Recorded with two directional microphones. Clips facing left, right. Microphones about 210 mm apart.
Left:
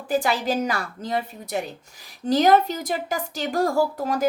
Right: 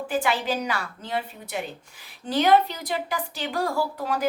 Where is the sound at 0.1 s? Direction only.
40° left (ahead or behind).